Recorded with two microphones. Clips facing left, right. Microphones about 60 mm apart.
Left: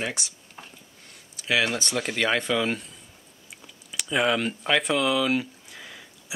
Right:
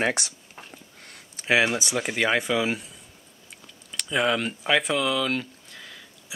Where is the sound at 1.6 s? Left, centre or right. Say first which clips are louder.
Right 1 dB; centre.